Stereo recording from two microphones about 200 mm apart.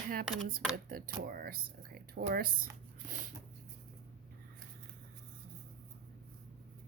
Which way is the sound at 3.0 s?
40° right (ahead or behind).